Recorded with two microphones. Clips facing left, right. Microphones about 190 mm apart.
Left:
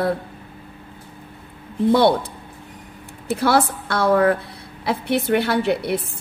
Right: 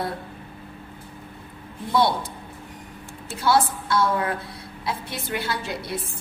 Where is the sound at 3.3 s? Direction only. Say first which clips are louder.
Left 3 dB; 60° left (ahead or behind).